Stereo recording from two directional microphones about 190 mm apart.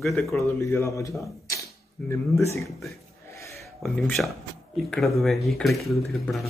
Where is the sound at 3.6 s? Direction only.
Centre (ahead or behind).